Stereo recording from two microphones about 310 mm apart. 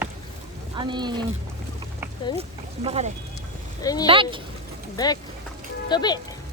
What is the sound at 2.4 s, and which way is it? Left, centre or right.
Speech, centre.